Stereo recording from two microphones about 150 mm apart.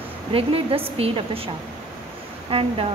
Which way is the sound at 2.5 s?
35° right (ahead or behind).